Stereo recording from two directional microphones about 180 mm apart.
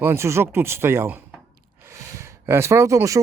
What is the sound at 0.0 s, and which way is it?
Speech, 15° right (ahead or behind).